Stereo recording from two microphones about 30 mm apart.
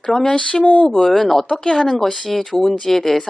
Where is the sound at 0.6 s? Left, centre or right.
Left.